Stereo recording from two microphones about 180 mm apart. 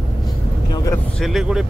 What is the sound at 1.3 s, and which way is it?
Speech, 5° right (ahead or behind).